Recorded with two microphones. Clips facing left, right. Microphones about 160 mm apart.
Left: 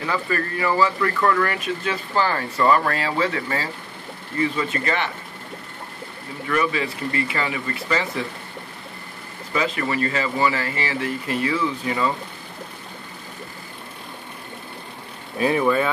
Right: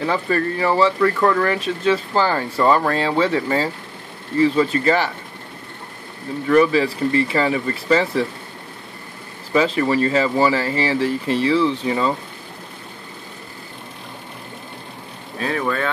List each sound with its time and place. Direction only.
0.0 s speech: 30° right (ahead or behind)
6.5 s speech: 35° right (ahead or behind)
9.5 s speech: 30° right (ahead or behind)
15.3 s speech: 10° left (ahead or behind)